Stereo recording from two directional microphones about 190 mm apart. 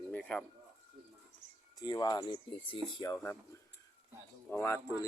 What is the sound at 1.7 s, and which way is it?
Speech, 20° left (ahead or behind).